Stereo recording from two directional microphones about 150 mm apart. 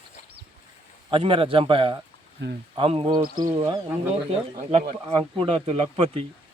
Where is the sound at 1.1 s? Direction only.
40° right (ahead or behind).